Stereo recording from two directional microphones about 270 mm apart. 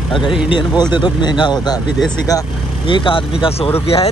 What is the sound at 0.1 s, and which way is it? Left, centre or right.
Speech, centre.